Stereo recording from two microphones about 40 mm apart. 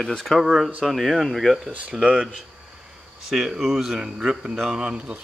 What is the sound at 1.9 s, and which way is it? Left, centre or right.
Speech, right.